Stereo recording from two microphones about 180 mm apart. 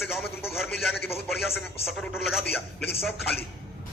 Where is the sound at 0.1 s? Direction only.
Centre (ahead or behind).